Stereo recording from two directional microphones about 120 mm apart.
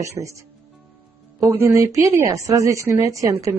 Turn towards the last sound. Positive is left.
turn(degrees=-25)  # may be behind; listen again after turning